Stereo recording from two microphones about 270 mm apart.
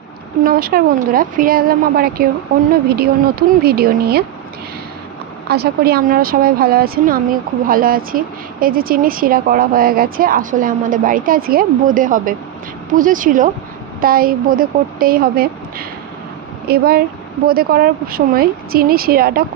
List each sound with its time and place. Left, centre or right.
0.4 s speech: right
5.5 s speech: right
16.6 s speech: right